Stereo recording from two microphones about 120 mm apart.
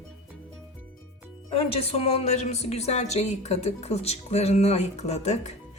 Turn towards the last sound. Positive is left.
turn(degrees=70)  # may be behind; listen again after turning